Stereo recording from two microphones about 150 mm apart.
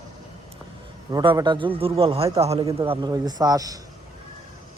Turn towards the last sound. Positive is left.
turn(degrees=-25)  # may be behind; listen again after turning